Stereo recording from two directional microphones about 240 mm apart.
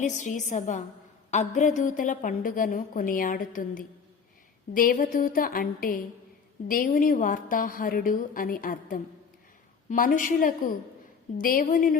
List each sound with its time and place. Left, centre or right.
0.0 s a woman's voice: left